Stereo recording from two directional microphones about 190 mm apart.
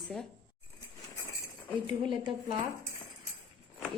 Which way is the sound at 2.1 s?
25° right (ahead or behind).